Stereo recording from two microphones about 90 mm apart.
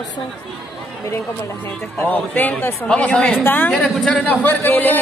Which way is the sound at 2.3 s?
20° left (ahead or behind).